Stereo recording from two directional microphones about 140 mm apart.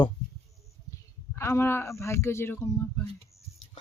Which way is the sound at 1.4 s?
20° left (ahead or behind).